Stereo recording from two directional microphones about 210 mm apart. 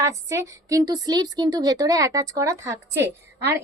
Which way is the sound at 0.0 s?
15° right (ahead or behind).